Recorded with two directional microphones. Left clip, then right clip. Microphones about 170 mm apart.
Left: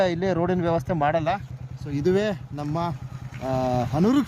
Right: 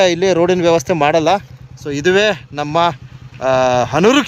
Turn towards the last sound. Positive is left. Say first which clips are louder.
# right 12 dB
turn(degrees=-35)  # may be behind; listen again after turning